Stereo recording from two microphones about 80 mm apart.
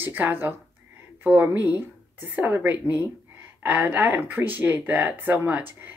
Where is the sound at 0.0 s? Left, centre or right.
Right.